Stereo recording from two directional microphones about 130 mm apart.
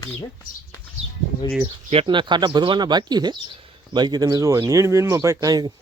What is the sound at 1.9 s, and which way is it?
Speech, 40° right (ahead or behind).